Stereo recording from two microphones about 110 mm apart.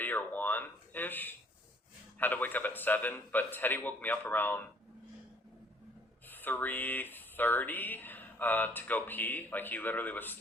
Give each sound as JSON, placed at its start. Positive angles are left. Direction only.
{"t": 0.0, "sound": "speech", "side_deg": 15}
{"t": 6.2, "sound": "speech", "side_deg": 15}